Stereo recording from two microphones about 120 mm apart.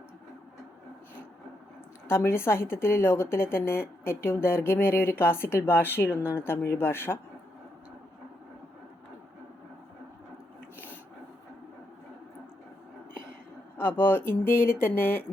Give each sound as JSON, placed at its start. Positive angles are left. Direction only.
{"t": 2.0, "sound": "a woman's voice", "side_deg": 20}
{"t": 13.7, "sound": "speech", "side_deg": 15}